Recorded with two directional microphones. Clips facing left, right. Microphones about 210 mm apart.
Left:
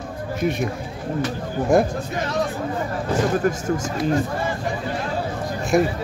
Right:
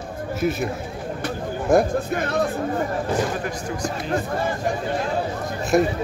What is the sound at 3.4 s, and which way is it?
Speech, 45° left (ahead or behind).